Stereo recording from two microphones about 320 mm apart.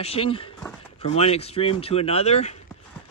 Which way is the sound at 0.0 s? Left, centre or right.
Centre.